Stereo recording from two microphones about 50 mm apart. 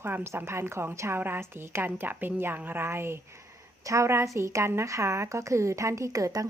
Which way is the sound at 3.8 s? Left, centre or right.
Right.